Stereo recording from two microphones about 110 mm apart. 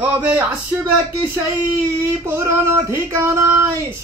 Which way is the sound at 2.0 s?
25° right (ahead or behind).